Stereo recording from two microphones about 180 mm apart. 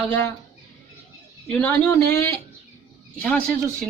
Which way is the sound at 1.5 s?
10° left (ahead or behind).